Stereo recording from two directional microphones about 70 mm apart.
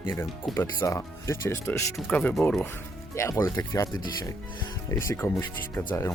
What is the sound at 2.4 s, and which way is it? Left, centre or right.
Speech, centre.